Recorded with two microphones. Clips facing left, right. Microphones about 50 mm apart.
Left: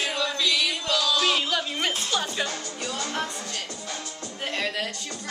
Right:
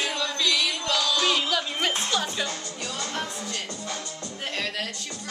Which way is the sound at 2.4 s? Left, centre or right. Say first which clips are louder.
Left 1 dB; centre.